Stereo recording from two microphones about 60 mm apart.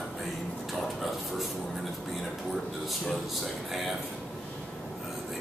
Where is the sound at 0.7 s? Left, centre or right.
Centre.